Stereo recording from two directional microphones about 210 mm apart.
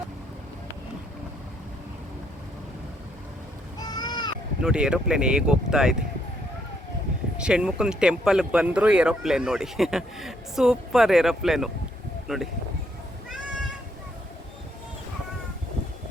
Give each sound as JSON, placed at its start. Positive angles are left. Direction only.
{"t": 3.8, "sound": "a sound", "side_deg": 20}
{"t": 4.6, "sound": "speech", "side_deg": -5}
{"t": 7.3, "sound": "speech", "side_deg": -5}